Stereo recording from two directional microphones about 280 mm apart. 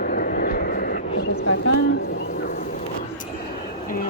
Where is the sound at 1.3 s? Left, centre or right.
Left.